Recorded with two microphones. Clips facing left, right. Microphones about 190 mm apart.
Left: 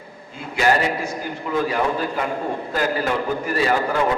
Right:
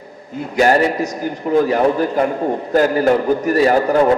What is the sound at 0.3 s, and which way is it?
A man's voice, 40° right (ahead or behind).